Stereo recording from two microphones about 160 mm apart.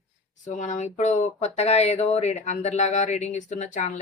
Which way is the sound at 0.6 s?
50° left (ahead or behind).